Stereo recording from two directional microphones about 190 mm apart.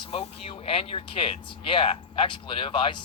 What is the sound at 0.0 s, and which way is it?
Speech, 30° left (ahead or behind).